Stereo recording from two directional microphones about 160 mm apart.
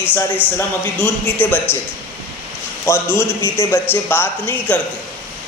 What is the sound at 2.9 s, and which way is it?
Speech, 15° left (ahead or behind).